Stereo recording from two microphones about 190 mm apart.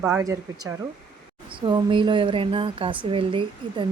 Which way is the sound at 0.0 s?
15° right (ahead or behind).